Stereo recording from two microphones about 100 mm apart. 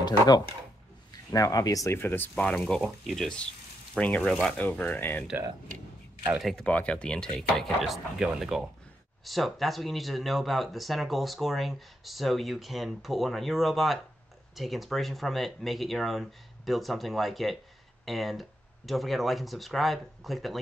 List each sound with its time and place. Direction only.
1.3 s speech: 40° left (ahead or behind)
2.0 s speech: 20° left (ahead or behind)
2.3 s speech: 10° left (ahead or behind)
4.6 s speech: 15° left (ahead or behind)
6.4 s speech: 10° left (ahead or behind)